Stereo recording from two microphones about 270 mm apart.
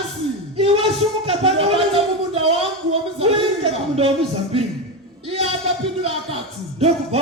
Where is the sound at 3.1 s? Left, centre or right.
Right.